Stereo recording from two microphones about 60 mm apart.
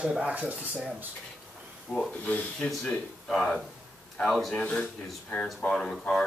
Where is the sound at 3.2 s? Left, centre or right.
Centre.